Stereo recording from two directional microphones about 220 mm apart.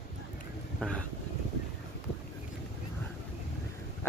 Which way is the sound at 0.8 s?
5° left (ahead or behind).